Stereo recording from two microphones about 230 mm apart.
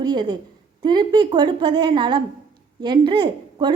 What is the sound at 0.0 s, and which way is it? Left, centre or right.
A woman's voice, centre.